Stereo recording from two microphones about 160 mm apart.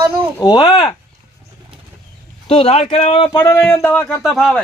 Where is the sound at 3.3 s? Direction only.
15° left (ahead or behind); by 4.6 s centre (ahead or behind).